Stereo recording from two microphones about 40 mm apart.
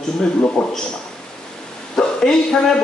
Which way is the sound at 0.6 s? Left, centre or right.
Centre.